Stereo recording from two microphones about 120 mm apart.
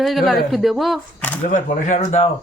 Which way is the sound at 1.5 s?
90° left.